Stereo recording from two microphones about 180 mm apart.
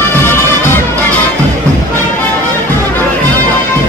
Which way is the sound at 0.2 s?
15° left (ahead or behind).